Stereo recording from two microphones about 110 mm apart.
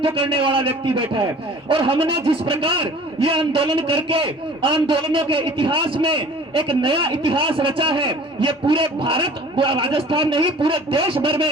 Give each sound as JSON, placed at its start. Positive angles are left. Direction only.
{"t": 0.0, "sound": "a man's voice", "side_deg": -55}